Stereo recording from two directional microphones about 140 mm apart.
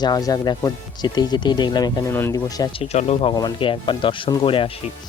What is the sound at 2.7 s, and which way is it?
Speech, 50° left (ahead or behind).